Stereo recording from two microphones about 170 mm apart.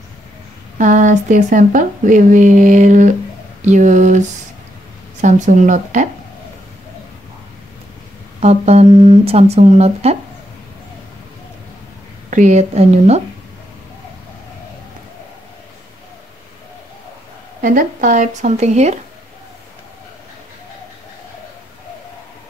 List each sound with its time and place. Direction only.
0.7 s speech: 45° right (ahead or behind)
8.4 s speech: 40° right (ahead or behind)
12.3 s speech: 45° right (ahead or behind)
17.6 s speech: 55° right (ahead or behind)